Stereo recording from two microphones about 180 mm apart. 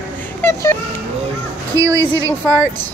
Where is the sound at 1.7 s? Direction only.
15° right (ahead or behind).